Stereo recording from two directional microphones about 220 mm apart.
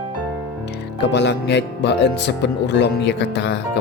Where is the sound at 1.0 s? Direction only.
50° left (ahead or behind).